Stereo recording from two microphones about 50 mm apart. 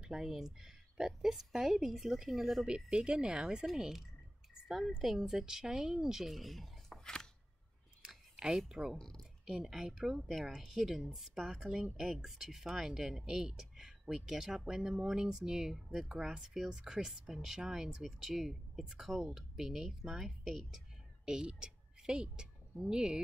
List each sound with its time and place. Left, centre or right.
0.0 s speech: centre
2.6 s speech: centre
3.6 s speech: centre
8.4 s speech: centre
8.9 s speech: centre
9.5 s a woman's voice: centre